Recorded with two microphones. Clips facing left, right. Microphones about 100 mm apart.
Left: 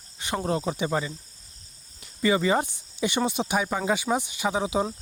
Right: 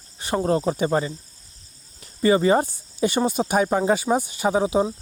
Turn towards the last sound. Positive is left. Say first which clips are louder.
# right 5 dB
turn(degrees=-35)  # may be behind; listen again after turning